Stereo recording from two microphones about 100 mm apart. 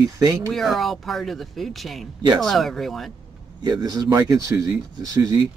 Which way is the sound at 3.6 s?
45° right (ahead or behind).